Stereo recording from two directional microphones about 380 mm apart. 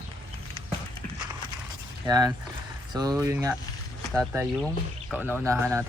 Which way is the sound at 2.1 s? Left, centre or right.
Centre.